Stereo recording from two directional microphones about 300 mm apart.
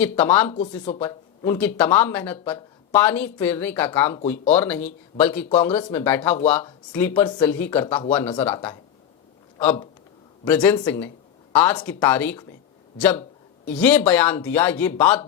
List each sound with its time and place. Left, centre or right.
0.0 s speech: centre
0.5 s speech: left
1.0 s speech: centre
10.4 s speech: centre